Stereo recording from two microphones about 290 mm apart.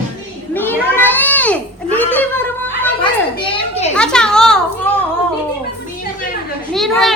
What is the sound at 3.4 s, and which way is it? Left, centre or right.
Children playing, centre.